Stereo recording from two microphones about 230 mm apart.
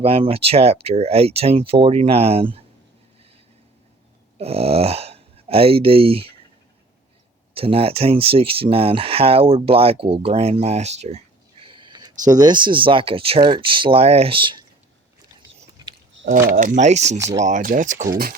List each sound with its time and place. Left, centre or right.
0.0 s speech: right
4.4 s speech: right
7.5 s speech: right
15.8 s a sound: centre
16.2 s a sound: right
16.6 s speech: right